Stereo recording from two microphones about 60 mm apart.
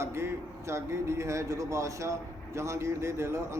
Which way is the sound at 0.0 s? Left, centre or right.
Right.